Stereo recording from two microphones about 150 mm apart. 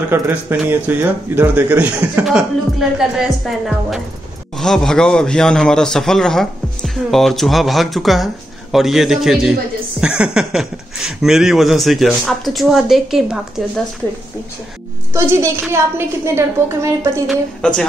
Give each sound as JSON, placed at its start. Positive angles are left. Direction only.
{"t": 0.1, "sound": "speech", "side_deg": -15}
{"t": 15.1, "sound": "a woman's voice", "side_deg": -20}
{"t": 17.3, "sound": "speech", "side_deg": 5}